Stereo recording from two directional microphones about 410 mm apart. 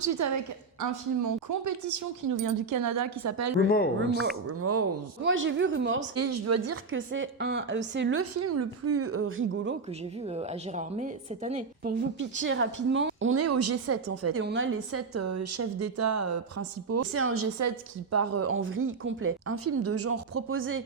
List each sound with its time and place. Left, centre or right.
0.0 s a woman's voice: right
10.2 s a woman's voice: centre